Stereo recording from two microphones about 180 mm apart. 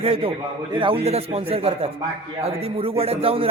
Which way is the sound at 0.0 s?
30° right (ahead or behind).